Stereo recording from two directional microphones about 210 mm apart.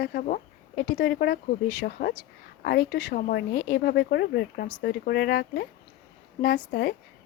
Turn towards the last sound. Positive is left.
turn(degrees=55)  # may be behind; listen again after turning